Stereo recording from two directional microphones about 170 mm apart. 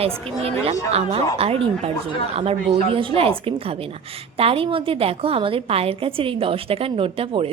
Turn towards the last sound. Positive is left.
turn(degrees=-35)  # may be behind; listen again after turning